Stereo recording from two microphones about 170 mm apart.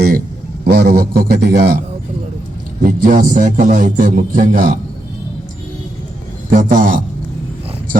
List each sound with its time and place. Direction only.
0.6 s a man's voice: 70° right (ahead or behind)
2.8 s a man's voice: 50° right (ahead or behind)
6.5 s a man's voice: 50° right (ahead or behind)